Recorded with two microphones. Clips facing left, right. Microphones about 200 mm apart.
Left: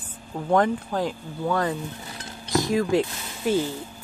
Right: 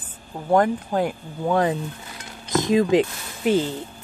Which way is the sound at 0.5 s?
10° right (ahead or behind).